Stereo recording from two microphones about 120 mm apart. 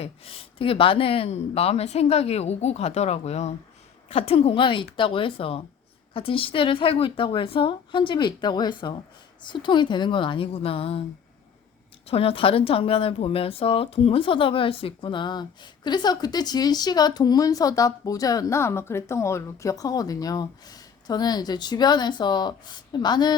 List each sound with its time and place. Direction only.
0.0 s speech: 50° left (ahead or behind)
4.1 s a woman's voice: 55° left (ahead or behind)
12.0 s speech: 55° left (ahead or behind); by 23.4 s 35° left (ahead or behind)